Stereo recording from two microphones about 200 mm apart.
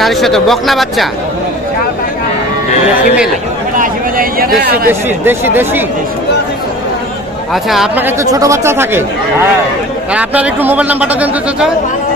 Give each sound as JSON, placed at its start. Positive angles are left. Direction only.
{"t": 0.0, "sound": "speech", "side_deg": 0}
{"t": 3.7, "sound": "a sound", "side_deg": -45}
{"t": 4.8, "sound": "speech", "side_deg": -10}
{"t": 7.5, "sound": "speech", "side_deg": 0}